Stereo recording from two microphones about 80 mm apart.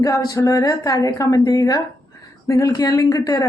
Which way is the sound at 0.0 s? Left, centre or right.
Left.